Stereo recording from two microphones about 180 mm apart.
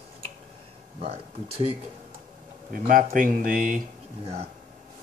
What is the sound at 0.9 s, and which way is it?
Speech, 35° right (ahead or behind).